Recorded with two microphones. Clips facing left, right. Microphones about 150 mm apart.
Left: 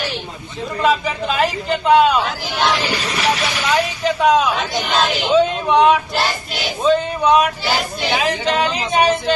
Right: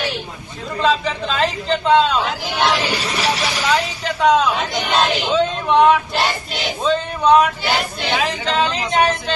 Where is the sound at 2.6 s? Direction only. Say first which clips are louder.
Even; 10° right (ahead or behind).